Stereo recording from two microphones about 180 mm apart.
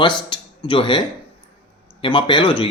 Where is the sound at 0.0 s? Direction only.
25° left (ahead or behind).